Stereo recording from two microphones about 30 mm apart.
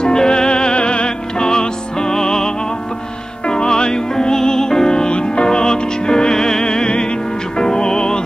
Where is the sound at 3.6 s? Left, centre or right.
Left.